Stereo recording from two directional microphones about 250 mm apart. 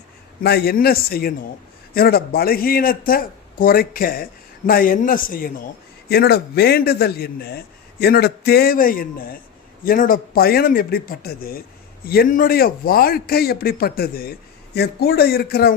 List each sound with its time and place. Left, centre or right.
0.4 s speech: left